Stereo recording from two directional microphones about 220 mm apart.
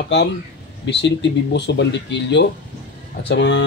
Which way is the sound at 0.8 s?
50° left (ahead or behind).